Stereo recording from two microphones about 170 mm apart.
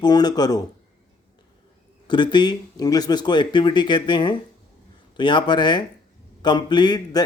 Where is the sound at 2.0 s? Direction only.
25° left (ahead or behind).